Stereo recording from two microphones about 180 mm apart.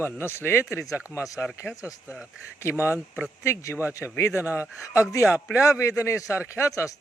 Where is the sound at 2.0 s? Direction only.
5° right (ahead or behind).